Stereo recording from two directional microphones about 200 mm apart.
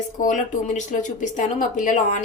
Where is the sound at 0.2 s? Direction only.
40° left (ahead or behind).